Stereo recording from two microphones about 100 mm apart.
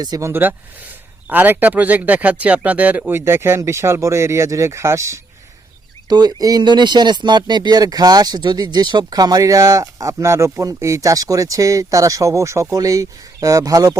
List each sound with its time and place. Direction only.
0.0 s speech: 40° right (ahead or behind)
0.3 s speech: 20° right (ahead or behind)
6.1 s speech: 40° right (ahead or behind)